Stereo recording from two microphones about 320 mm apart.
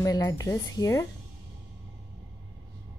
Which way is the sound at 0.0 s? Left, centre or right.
Centre.